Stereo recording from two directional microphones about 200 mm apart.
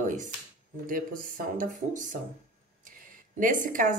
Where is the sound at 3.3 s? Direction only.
40° right (ahead or behind).